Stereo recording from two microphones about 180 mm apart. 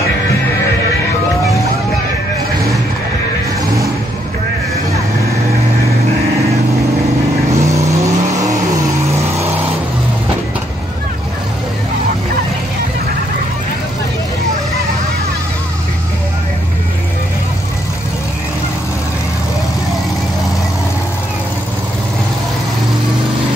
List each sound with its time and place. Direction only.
7.5 s vehicle: 15° right (ahead or behind)